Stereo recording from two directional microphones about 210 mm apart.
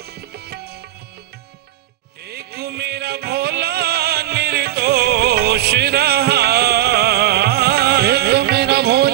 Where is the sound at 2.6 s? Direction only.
50° right (ahead or behind).